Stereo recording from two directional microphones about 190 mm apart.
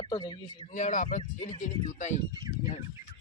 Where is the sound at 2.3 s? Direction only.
20° right (ahead or behind).